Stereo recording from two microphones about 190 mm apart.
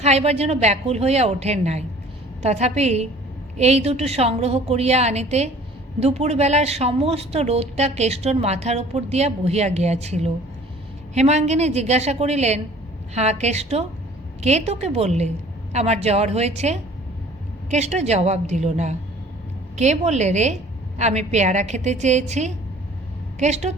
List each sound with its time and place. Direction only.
0.0 s a woman's voice: 35° right (ahead or behind)